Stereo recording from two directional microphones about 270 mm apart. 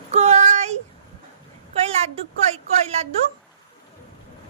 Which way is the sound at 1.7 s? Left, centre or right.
Right.